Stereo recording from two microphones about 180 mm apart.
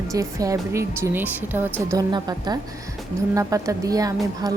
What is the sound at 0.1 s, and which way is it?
A woman's voice, 20° right (ahead or behind).